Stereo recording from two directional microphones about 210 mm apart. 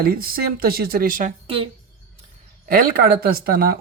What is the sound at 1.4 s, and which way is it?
Speech, 25° right (ahead or behind).